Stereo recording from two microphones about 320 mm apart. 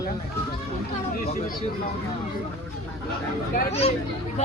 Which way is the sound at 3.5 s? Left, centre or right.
Centre.